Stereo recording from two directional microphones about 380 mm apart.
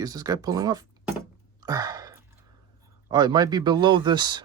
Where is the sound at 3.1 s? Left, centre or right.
Centre.